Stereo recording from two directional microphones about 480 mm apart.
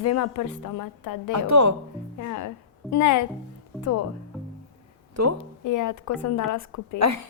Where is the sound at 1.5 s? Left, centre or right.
Right.